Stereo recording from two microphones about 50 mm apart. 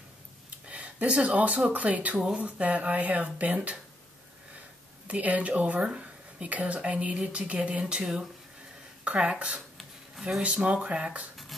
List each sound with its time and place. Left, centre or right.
0.7 s speech: right
2.1 s speech: centre
2.4 s speech: right
5.0 s speech: right